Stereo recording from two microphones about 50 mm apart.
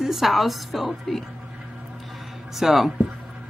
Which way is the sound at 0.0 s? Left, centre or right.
Centre.